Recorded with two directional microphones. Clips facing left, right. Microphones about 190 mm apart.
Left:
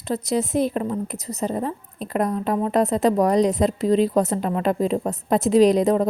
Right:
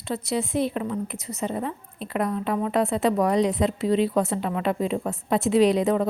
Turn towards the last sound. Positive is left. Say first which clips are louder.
# left 3 dB
turn(degrees=40)  # may be behind; listen again after turning